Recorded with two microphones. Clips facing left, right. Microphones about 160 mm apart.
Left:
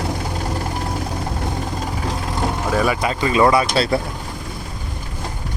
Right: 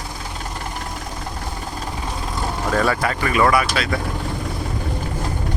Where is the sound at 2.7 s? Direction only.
15° left (ahead or behind); by 4.0 s 30° left (ahead or behind).